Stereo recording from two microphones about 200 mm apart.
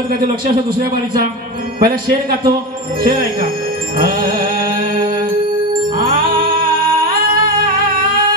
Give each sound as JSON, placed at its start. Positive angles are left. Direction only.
{"t": 1.8, "sound": "a man's voice", "side_deg": -50}
{"t": 4.0, "sound": "music", "side_deg": -45}